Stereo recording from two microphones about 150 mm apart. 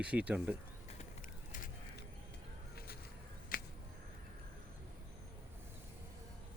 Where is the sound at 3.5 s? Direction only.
70° left (ahead or behind).